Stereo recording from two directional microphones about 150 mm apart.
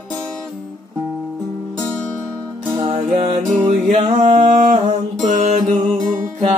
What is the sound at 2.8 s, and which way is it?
Music, 40° right (ahead or behind).